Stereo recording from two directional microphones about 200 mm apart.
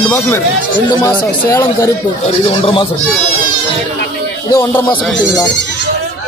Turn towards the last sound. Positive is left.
turn(degrees=15)  # may be behind; listen again after turning